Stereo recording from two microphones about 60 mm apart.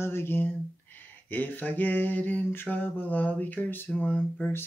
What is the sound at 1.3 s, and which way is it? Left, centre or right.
Mantra, left.